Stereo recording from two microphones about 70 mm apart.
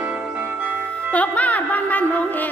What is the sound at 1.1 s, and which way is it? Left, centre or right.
Music, left.